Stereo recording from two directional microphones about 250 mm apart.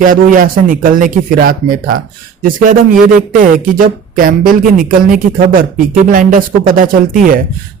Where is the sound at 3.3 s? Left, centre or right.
Right.